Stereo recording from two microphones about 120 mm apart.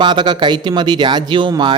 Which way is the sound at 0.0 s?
40° right (ahead or behind).